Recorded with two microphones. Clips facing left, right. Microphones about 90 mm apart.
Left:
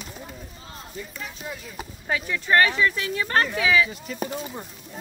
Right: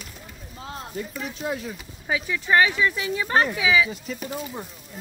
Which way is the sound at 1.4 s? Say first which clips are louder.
Right 9 dB; 70° right (ahead or behind).